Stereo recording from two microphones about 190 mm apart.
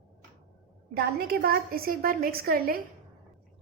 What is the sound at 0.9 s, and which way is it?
A woman's voice, 55° right (ahead or behind).